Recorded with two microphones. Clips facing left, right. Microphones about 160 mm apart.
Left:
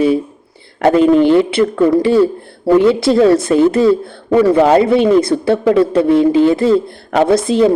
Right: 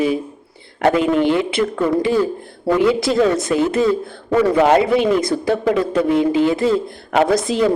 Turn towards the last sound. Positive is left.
turn(degrees=30)  # may be behind; listen again after turning